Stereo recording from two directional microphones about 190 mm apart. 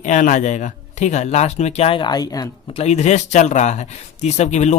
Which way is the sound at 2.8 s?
35° left (ahead or behind).